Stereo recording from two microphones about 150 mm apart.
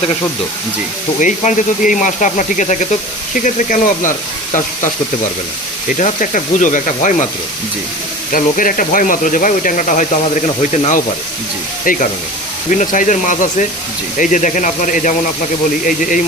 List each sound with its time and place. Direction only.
1.2 s speech: 55° left (ahead or behind)
6.0 s speech: 55° left (ahead or behind)
8.3 s speech: 65° left (ahead or behind)
11.9 s speech: 65° left (ahead or behind)